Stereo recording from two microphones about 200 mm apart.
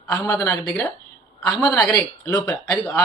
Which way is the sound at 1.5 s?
20° left (ahead or behind).